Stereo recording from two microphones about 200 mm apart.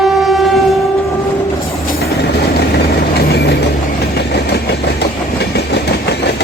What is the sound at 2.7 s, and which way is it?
Vehicle, 50° left (ahead or behind).